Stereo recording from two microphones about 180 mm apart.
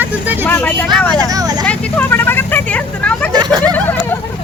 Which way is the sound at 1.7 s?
10° left (ahead or behind).